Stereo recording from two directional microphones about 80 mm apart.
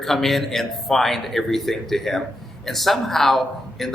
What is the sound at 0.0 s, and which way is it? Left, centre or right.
A man's voice, centre.